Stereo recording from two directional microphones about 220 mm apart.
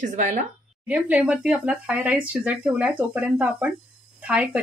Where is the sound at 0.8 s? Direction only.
5° right (ahead or behind).